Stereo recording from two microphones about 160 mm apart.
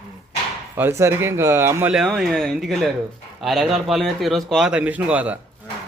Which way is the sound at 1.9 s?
5° right (ahead or behind).